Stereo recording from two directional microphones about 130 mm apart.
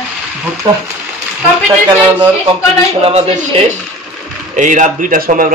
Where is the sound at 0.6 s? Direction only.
30° right (ahead or behind).